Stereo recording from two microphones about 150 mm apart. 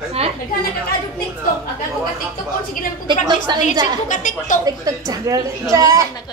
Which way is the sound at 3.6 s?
60° left (ahead or behind).